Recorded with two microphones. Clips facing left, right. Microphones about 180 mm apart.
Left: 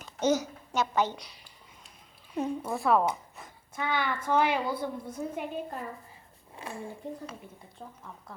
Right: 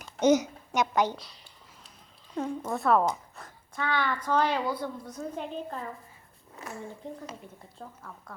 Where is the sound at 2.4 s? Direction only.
15° left (ahead or behind).